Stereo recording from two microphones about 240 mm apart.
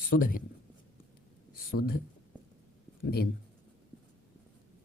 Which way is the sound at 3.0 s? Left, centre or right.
Left.